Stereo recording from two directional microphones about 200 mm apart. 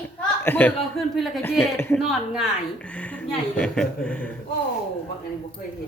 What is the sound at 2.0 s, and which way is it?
A woman's voice, centre (ahead or behind).